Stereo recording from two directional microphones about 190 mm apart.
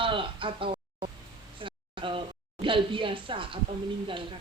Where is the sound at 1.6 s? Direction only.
25° right (ahead or behind).